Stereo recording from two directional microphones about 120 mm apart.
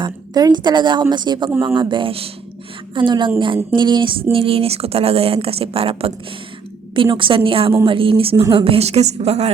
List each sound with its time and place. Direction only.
0.0 s a woman's voice: 35° right (ahead or behind); by 9.5 s 60° right (ahead or behind)